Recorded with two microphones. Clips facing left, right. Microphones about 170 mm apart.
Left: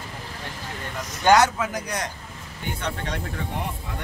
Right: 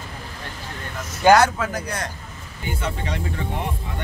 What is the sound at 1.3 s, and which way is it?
Speech, 20° left (ahead or behind).